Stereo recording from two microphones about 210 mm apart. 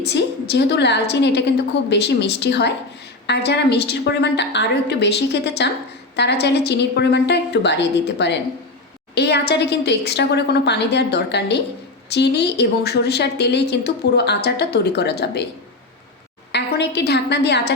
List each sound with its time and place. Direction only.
0.1 s a woman's voice: 55° left (ahead or behind)
16.5 s a woman's voice: 55° left (ahead or behind)